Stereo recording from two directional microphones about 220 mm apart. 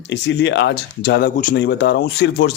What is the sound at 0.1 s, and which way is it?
Speech, 55° left (ahead or behind).